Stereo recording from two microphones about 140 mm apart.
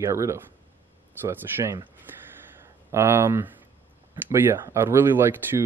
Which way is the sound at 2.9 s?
15° right (ahead or behind).